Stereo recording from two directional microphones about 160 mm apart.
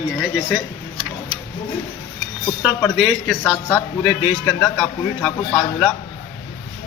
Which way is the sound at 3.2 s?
10° left (ahead or behind).